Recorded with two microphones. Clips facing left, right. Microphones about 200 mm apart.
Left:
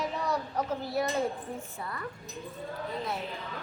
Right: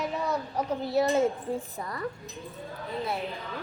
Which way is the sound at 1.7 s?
40° right (ahead or behind).